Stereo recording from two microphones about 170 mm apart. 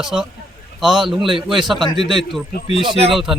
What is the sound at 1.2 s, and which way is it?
Speech, 30° right (ahead or behind).